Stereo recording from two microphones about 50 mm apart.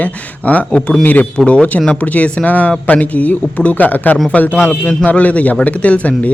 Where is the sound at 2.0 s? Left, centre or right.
Left.